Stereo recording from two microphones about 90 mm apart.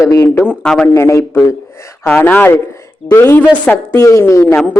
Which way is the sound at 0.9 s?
30° left (ahead or behind).